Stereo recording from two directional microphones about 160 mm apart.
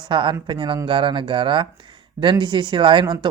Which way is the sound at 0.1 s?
30° right (ahead or behind).